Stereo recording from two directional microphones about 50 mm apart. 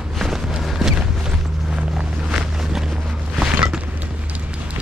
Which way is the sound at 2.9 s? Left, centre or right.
Centre.